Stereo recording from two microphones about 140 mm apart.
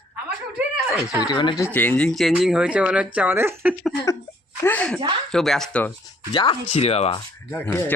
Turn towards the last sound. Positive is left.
turn(degrees=15)  # may be behind; listen again after turning